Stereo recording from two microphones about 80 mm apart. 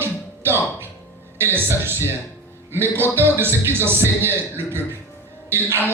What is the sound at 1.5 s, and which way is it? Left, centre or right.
Speech, right.